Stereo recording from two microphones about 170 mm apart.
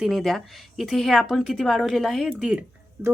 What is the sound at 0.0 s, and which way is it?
A woman's voice, centre (ahead or behind).